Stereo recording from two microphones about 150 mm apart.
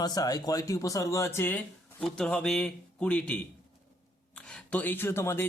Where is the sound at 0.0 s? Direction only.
25° left (ahead or behind).